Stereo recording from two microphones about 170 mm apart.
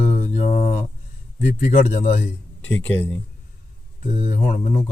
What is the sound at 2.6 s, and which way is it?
Speech, 10° left (ahead or behind).